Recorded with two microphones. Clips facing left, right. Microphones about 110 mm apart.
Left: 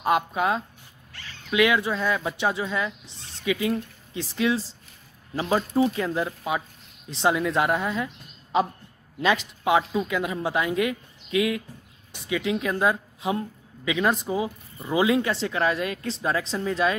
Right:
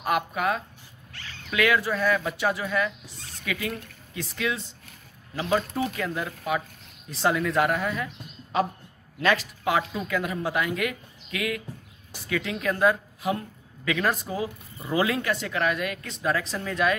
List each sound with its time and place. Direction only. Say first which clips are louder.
0.0 s a woman's voice: left 3 dB; 25° left (ahead or behind)